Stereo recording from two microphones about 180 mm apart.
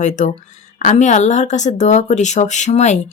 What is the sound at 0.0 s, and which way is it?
Speech, 40° left (ahead or behind).